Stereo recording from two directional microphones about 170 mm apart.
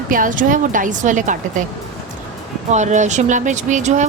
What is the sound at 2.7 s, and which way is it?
A woman's voice, 45° right (ahead or behind).